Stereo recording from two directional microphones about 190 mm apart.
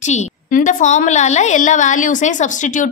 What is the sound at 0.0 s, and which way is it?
A woman's voice, 40° left (ahead or behind).